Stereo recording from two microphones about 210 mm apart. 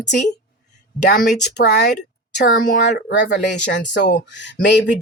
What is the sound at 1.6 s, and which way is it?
Speech, 50° left (ahead or behind).